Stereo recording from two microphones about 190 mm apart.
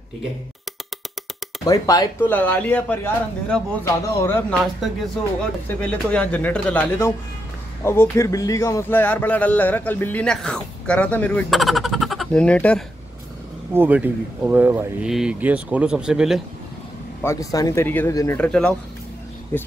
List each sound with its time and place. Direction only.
1.6 s speech: 20° left (ahead or behind)
2.3 s a man's voice: 10° left (ahead or behind)
4.6 s a man's voice: centre (ahead or behind)
13.7 s speech: 10° right (ahead or behind)
17.2 s a man's voice: 15° left (ahead or behind)